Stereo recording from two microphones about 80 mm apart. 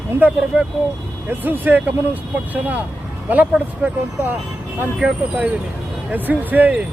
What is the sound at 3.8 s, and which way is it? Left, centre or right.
Speech, right.